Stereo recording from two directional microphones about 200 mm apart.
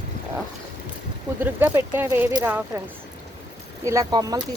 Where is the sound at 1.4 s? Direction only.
10° right (ahead or behind).